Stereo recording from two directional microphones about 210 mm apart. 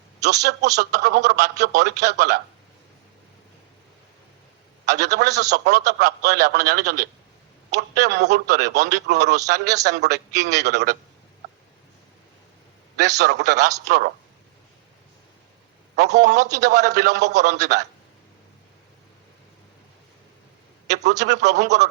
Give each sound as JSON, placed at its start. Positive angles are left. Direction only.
{"t": 0.3, "sound": "a man's voice", "side_deg": -50}
{"t": 5.1, "sound": "a man's voice", "side_deg": -50}
{"t": 13.0, "sound": "a man's voice", "side_deg": -50}
{"t": 16.2, "sound": "a man's voice", "side_deg": -50}
{"t": 20.9, "sound": "a man's voice", "side_deg": -55}